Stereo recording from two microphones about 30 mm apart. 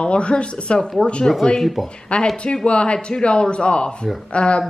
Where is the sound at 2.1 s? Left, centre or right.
Left.